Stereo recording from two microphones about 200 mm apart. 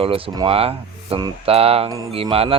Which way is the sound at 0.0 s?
25° right (ahead or behind).